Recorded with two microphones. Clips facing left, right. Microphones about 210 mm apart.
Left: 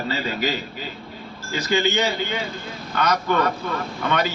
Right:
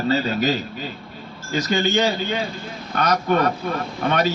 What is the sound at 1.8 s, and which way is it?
A man's voice, 45° right (ahead or behind).